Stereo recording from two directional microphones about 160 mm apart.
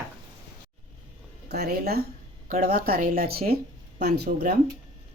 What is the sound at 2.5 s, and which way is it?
Speech, 65° right (ahead or behind).